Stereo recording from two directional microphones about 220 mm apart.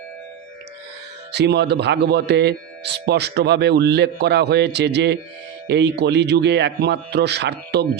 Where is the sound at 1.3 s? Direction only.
50° right (ahead or behind).